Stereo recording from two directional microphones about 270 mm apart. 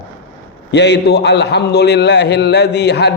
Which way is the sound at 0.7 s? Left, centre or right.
Left.